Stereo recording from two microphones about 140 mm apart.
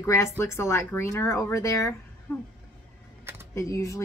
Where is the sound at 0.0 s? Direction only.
20° left (ahead or behind).